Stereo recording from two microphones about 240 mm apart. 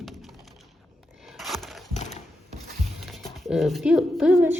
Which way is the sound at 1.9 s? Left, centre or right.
Left.